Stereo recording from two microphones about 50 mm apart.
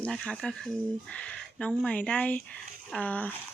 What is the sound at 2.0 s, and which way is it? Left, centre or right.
Speech, left.